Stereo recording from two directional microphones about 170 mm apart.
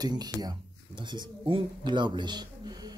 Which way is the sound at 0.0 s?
25° right (ahead or behind).